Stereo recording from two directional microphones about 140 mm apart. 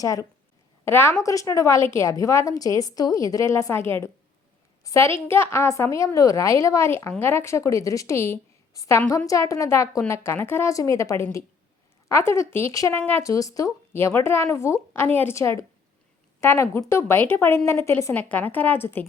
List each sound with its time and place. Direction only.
0.0 s a woman's voice: 25° left (ahead or behind)